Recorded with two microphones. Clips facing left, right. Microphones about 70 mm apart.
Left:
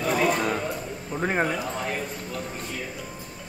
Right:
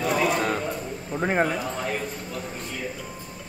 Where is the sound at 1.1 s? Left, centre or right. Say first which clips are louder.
Right 2 dB; centre.